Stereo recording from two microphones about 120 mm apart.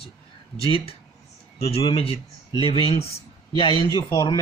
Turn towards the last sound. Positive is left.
turn(degrees=35)  # may be behind; listen again after turning